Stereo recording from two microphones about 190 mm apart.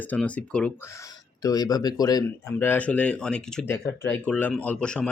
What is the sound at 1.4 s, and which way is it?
Speech, 20° left (ahead or behind).